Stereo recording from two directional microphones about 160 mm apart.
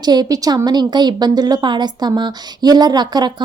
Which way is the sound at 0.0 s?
25° right (ahead or behind).